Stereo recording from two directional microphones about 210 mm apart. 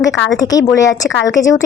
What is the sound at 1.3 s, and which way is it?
Speech, 15° left (ahead or behind).